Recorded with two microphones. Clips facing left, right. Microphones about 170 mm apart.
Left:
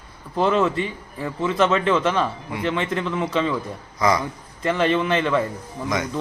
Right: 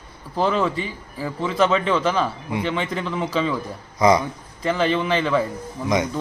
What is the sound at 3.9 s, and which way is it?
Speech, 20° right (ahead or behind).